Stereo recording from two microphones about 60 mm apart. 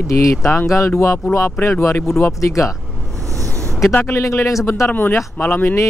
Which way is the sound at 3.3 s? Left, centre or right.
Right.